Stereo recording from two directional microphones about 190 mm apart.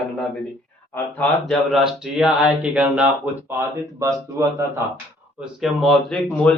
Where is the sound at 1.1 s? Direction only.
Centre (ahead or behind); by 4.6 s 15° right (ahead or behind).